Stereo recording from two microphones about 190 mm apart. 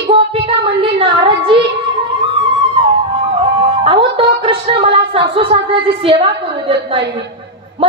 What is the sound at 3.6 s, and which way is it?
Music, 25° right (ahead or behind).